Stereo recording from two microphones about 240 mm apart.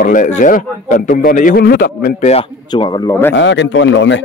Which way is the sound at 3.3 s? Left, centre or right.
Left.